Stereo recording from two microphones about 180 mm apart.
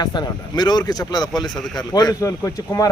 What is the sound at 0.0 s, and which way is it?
Speech, 25° left (ahead or behind).